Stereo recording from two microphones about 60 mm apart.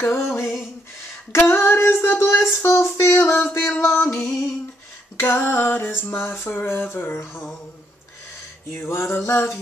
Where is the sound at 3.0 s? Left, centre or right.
Left.